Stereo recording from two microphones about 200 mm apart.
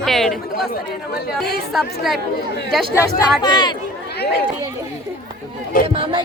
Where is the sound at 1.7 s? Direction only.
Centre (ahead or behind).